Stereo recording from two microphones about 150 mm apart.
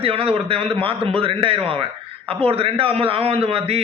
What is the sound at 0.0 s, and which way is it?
A man's voice, 40° right (ahead or behind).